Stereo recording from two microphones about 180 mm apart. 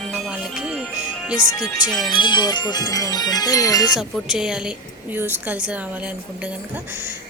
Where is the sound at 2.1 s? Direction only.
25° left (ahead or behind).